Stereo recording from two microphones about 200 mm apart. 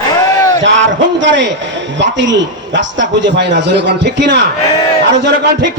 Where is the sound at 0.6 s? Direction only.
65° right (ahead or behind).